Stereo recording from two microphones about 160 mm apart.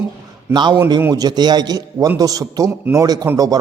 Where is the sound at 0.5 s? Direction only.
30° right (ahead or behind).